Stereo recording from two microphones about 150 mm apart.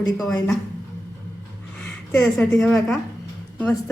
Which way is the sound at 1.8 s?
10° left (ahead or behind).